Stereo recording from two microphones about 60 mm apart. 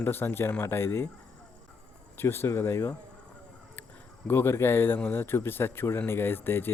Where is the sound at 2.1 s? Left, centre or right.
Left.